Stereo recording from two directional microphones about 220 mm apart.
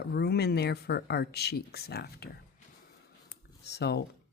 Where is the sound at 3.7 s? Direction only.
50° left (ahead or behind).